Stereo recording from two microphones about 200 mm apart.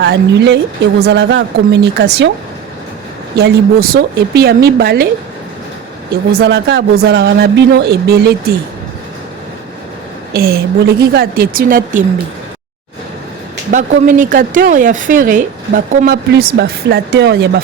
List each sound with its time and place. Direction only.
0.0 s a woman's voice: 60° right (ahead or behind)
3.3 s a woman's voice: 50° right (ahead or behind)
6.3 s a woman's voice: 55° right (ahead or behind)
10.3 s a woman's voice: 50° right (ahead or behind)
13.7 s a woman's voice: 45° right (ahead or behind)